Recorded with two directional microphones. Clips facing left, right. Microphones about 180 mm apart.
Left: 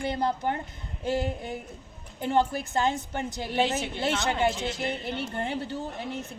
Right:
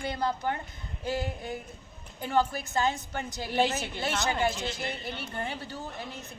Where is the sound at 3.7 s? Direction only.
25° left (ahead or behind).